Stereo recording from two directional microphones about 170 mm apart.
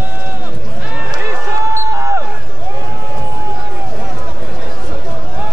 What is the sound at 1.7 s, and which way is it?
Basketball bounce, 15° right (ahead or behind).